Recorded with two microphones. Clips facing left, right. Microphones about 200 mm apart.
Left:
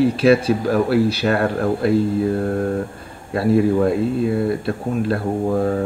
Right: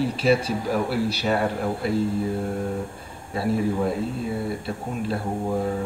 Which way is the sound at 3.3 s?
70° left (ahead or behind).